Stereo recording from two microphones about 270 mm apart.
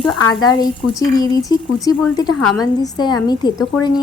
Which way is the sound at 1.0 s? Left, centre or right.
Centre.